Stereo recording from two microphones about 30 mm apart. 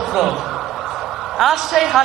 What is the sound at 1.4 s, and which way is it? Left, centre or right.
Speech, centre.